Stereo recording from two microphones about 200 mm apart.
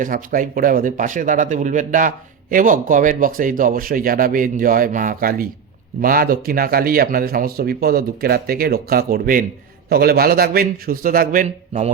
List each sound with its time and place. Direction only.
0.0 s speech: 45° right (ahead or behind)